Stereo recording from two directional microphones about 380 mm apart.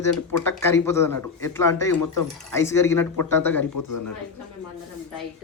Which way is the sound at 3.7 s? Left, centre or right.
Left.